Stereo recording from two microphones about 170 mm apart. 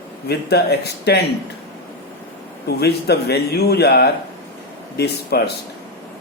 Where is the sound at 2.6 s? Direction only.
75° left (ahead or behind).